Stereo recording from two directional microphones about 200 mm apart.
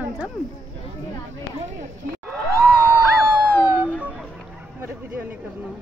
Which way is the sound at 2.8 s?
10° right (ahead or behind).